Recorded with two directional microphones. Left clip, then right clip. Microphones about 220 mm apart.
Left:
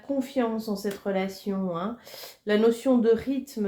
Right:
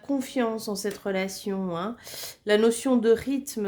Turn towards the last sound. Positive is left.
turn(degrees=-40)  # may be behind; listen again after turning